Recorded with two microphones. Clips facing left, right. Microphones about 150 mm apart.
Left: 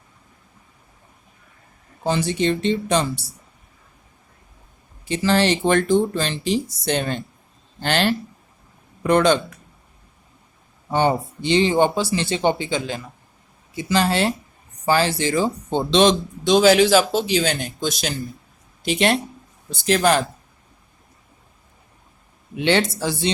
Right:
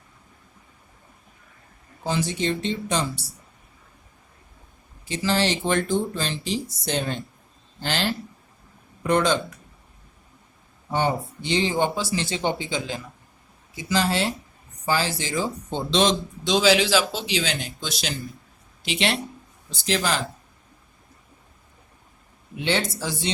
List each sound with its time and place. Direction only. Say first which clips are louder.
2.0 s speech: left 5 dB; 65° left (ahead or behind)
5.0 s speech: left 5 dB; 60° left (ahead or behind)
10.9 s speech: left 5 dB; 70° left (ahead or behind)
22.6 s speech: left 6 dB; 65° left (ahead or behind)